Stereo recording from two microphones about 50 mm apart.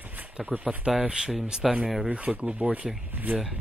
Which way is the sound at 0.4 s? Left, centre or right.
Centre.